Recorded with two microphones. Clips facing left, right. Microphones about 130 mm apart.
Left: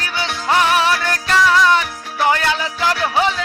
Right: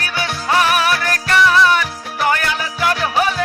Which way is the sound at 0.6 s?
25° left (ahead or behind).